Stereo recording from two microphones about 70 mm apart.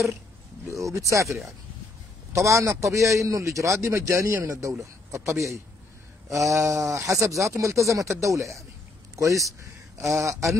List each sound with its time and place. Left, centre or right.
0.7 s speech: right